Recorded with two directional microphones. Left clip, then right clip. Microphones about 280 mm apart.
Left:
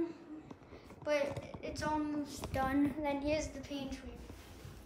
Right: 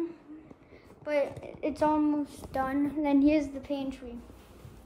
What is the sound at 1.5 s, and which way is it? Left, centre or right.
A woman's voice, centre.